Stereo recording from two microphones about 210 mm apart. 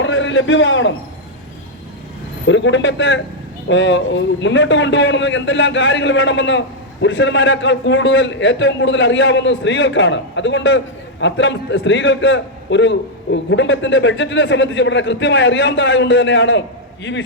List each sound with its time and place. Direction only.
0.0 s a man's voice: 65° left (ahead or behind)
2.5 s a man's voice: 60° left (ahead or behind)